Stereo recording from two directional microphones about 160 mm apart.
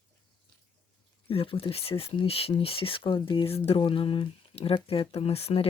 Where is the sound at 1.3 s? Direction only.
35° left (ahead or behind).